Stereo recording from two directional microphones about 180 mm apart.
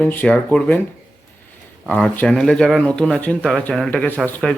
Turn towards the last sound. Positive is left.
turn(degrees=5)  # may be behind; listen again after turning